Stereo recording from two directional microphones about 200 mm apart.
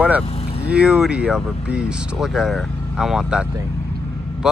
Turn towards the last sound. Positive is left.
turn(degrees=-5)  # may be behind; listen again after turning